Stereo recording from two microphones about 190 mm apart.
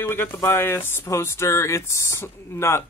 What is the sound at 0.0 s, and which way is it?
Speech, 10° left (ahead or behind).